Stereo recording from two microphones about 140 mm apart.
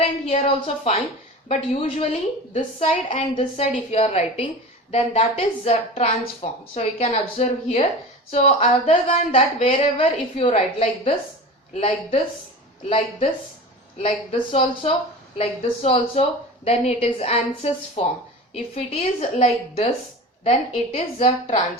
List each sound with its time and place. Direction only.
0.0 s a woman's voice: 45° left (ahead or behind)